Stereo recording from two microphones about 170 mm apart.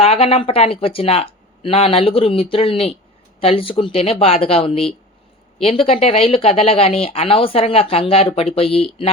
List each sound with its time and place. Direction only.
0.0 s speech: 35° left (ahead or behind)